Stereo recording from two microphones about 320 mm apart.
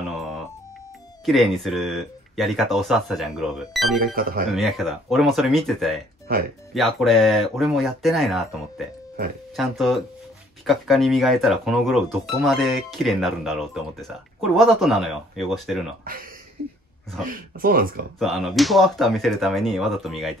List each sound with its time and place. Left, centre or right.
0.0 s music: centre
1.2 s speech: centre
4.0 s speech: right
4.6 s speech: centre
16.0 s speech: right
17.3 s speech: right
18.2 s speech: centre